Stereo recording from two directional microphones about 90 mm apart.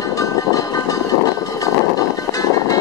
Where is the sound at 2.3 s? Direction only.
40° left (ahead or behind).